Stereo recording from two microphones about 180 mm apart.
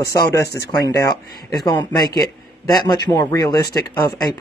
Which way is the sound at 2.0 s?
20° left (ahead or behind).